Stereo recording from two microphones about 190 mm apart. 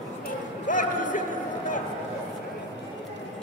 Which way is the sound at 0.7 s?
45° left (ahead or behind).